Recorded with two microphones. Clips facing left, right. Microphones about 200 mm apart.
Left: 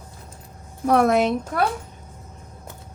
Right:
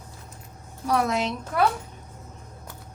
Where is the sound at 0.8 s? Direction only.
55° left (ahead or behind).